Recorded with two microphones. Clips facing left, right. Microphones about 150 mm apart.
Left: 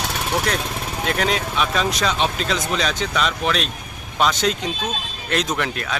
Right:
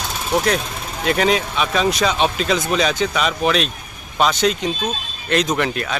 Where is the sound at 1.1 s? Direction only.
Centre (ahead or behind).